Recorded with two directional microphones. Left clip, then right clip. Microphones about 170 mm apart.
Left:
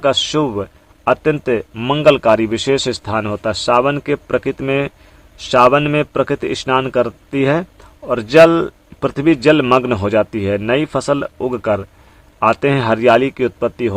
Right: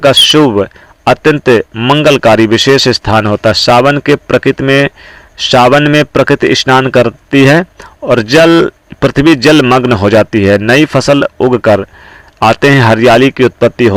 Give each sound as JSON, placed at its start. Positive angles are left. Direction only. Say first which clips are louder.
{"t": 0.0, "sound": "speech", "louder": "right 10 dB", "side_deg": -25}
{"t": 1.7, "sound": "speech", "louder": "right 9 dB", "side_deg": -15}
{"t": 2.0, "sound": "speech", "louder": "right 4 dB", "side_deg": -30}